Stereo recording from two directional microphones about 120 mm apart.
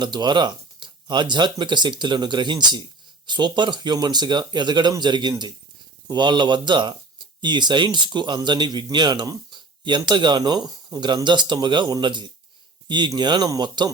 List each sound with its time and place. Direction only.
0.0 s speech: 40° right (ahead or behind)